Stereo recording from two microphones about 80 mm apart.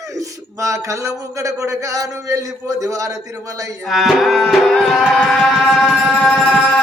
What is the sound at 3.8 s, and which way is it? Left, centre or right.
Music, centre.